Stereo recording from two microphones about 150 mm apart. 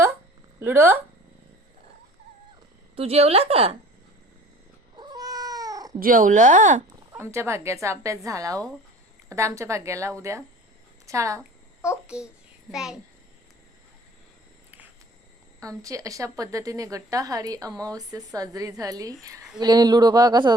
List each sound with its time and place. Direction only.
0.6 s speech: 15° right (ahead or behind)
2.9 s a woman's voice: 45° right (ahead or behind)
4.9 s cat: 25° right (ahead or behind)
6.0 s speech: 65° right (ahead or behind)
6.9 s a woman's voice: 20° right (ahead or behind)
12.0 s a child's voice: 5° right (ahead or behind)
15.6 s a woman's voice: 20° right (ahead or behind)